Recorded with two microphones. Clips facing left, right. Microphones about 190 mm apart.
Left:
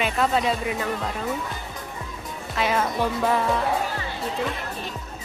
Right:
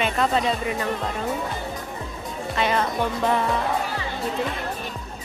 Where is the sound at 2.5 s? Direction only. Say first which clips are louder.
Right 1 dB; 5° left (ahead or behind).